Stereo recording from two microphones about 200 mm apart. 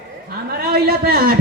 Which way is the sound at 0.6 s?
50° right (ahead or behind).